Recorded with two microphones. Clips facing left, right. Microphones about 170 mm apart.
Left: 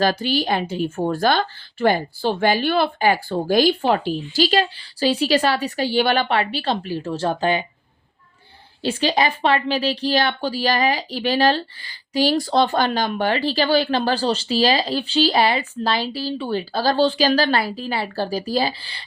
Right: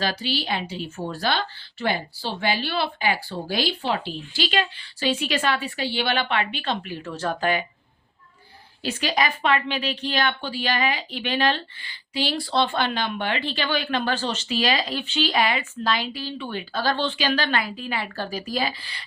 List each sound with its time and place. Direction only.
0.0 s a woman's voice: 50° left (ahead or behind); by 7.6 s 30° left (ahead or behind)
8.8 s speech: 30° left (ahead or behind)